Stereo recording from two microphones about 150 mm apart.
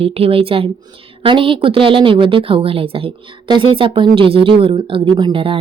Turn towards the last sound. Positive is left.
turn(degrees=-35)  # may be behind; listen again after turning